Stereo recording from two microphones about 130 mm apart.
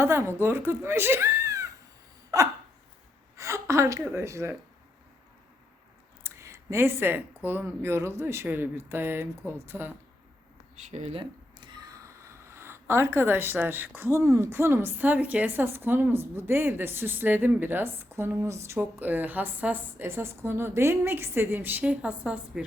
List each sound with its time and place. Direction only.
0.0 s speech: 20° right (ahead or behind)
2.3 s hiccup: 25° right (ahead or behind)
3.3 s a woman's voice: 25° right (ahead or behind)
6.2 s speech: 20° right (ahead or behind)
10.8 s speech: 65° right (ahead or behind)
11.2 s a sound: 35° right (ahead or behind)
12.0 s speech: 20° right (ahead or behind)